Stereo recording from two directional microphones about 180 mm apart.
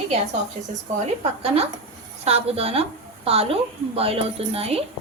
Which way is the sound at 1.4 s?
35° right (ahead or behind).